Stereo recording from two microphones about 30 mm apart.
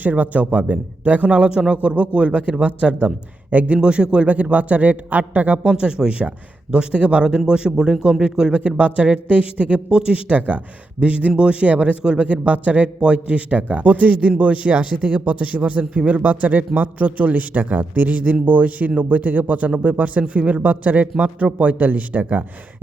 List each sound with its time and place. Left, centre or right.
0.0 s a man's voice: right
1.7 s a man's voice: right
3.5 s a man's voice: right
3.8 s speech: right
4.3 s a man's voice: right
5.6 s a man's voice: right
7.3 s speech: right
8.6 s a man's voice: right
11.3 s speech: right
11.6 s a man's voice: right
13.0 s a man's voice: right
21.4 s a man's voice: right